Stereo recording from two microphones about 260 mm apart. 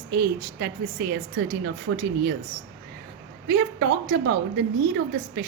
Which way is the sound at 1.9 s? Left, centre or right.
Right.